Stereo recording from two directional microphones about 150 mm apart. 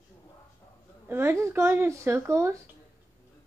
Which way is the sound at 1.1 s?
15° right (ahead or behind).